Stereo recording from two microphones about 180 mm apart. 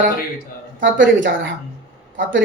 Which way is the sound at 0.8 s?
90° right.